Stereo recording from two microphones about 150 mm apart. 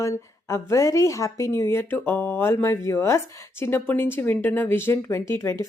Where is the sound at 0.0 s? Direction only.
20° left (ahead or behind).